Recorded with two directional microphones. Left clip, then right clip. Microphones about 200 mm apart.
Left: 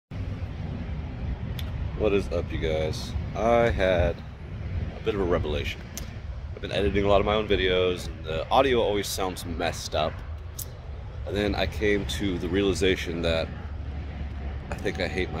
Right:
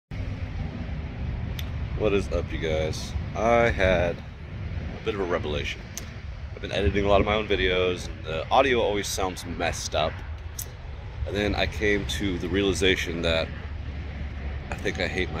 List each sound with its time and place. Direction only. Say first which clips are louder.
1.6 s speech: even; 10° left (ahead or behind)
11.3 s speech: right 1 dB; 10° left (ahead or behind)
14.7 s speech: right 1 dB; 10° left (ahead or behind)